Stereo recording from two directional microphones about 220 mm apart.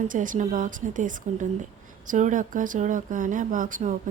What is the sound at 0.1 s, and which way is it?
Speech, 35° right (ahead or behind).